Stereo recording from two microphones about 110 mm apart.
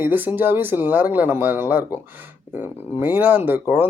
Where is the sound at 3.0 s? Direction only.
15° right (ahead or behind).